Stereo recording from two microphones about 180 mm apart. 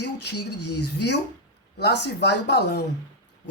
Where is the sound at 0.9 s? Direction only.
70° left (ahead or behind).